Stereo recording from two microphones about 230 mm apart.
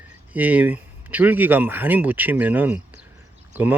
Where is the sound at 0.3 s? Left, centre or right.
Centre.